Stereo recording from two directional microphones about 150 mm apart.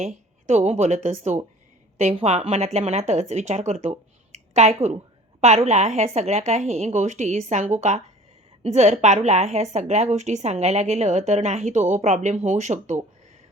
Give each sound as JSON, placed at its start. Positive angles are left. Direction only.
{"t": 0.0, "sound": "a woman's voice", "side_deg": -50}